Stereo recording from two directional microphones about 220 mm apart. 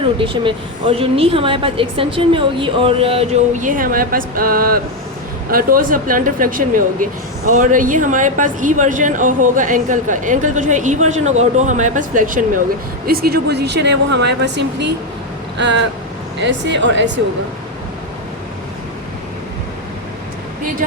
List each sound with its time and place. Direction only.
0.2 s a woman's voice: 25° right (ahead or behind); by 14.9 s 50° right (ahead or behind)
15.5 s vehicle: 55° right (ahead or behind)
16.4 s speech: 55° right (ahead or behind)